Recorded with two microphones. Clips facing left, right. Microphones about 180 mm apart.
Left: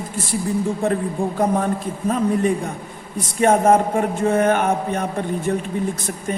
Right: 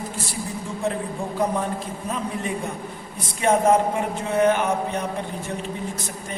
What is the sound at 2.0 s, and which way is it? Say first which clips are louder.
Speech: left 10 dB; 50° left (ahead or behind).